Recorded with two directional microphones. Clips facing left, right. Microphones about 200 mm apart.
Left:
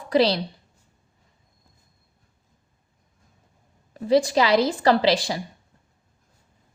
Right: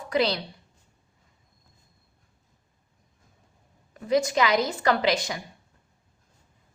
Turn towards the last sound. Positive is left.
turn(degrees=30)  # may be behind; listen again after turning